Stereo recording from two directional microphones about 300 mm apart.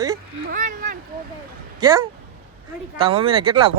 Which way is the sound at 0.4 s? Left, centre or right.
Right.